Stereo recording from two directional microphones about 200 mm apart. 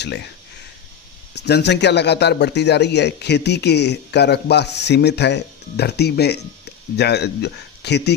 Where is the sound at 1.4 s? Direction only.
55° left (ahead or behind).